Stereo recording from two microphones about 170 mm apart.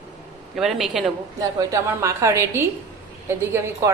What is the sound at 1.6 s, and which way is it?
A woman's voice, 20° right (ahead or behind).